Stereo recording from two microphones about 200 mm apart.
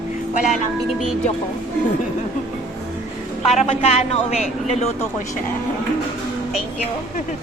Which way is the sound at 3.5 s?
30° left (ahead or behind).